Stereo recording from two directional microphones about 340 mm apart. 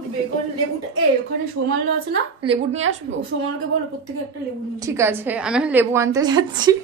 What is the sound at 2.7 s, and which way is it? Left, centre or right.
Speech, right.